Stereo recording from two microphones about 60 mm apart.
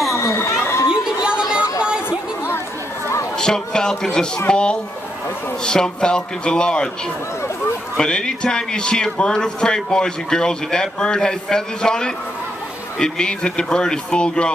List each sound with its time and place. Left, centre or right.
0.1 s chatter: left
1.0 s chatter: centre
2.0 s chatter: left
3.3 s speech: centre
8.0 s speech: centre